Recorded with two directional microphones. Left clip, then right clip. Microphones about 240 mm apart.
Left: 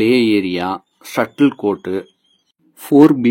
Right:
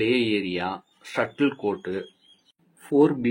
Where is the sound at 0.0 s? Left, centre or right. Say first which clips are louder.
Left 9 dB; left.